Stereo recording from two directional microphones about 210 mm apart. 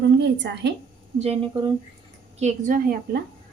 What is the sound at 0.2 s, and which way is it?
Speech, 55° right (ahead or behind).